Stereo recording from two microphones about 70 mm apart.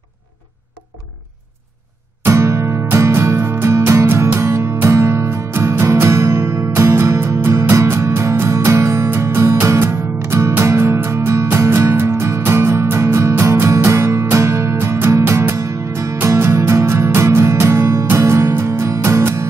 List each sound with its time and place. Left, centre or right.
2.2 s music: right
16.2 s music: right